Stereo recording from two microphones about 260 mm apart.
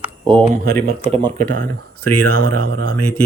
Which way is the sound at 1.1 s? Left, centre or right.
Right.